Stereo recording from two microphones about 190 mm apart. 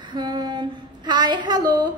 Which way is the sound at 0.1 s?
20° right (ahead or behind).